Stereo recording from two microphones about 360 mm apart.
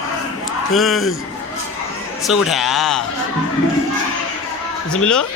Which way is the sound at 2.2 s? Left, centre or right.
Centre.